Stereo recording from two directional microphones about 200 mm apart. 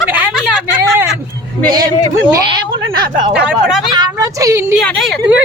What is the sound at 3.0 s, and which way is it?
Speech, 20° right (ahead or behind).